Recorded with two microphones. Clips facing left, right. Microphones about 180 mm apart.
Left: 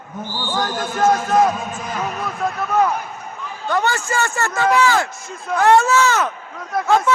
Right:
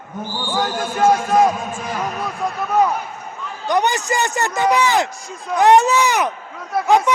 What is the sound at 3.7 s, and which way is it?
A man's voice, 15° right (ahead or behind).